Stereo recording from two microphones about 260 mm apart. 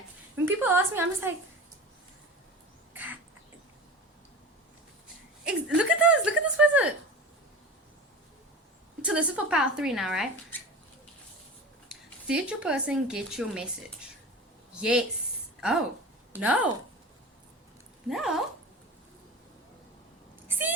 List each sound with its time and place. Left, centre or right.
0.4 s a woman's voice: centre
2.9 s crow: centre
5.5 s a sound: centre
9.0 s speech: centre
12.3 s speech: centre
14.7 s speech: centre
16.3 s a woman's voice: centre
18.1 s speech: centre
20.5 s a sound: centre